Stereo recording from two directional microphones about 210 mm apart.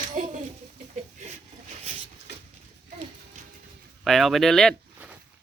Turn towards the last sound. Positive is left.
turn(degrees=0)  # may be behind; listen again after turning